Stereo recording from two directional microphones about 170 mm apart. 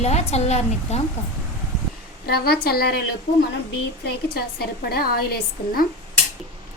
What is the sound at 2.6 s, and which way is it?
Speech, 65° left (ahead or behind).